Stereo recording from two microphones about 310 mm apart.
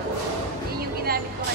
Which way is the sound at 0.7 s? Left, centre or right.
Right.